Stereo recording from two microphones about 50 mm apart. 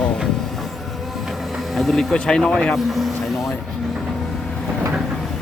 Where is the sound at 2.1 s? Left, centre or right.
Centre.